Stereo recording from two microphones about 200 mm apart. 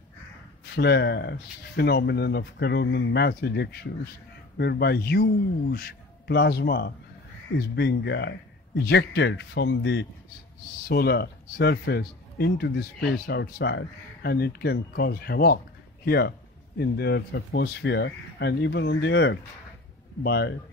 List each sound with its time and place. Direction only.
0.7 s a man's voice: 55° left (ahead or behind)
10.9 s a man's voice: 50° left (ahead or behind)